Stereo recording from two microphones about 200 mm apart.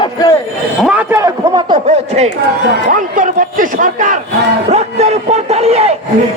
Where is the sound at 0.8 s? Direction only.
10° right (ahead or behind).